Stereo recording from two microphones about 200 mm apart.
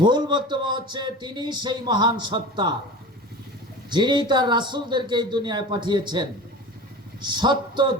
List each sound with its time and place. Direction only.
0.0 s speech: 20° right (ahead or behind)
3.8 s speech: 20° right (ahead or behind)